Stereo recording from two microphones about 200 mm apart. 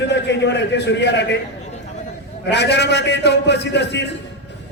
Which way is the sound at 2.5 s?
60° left (ahead or behind).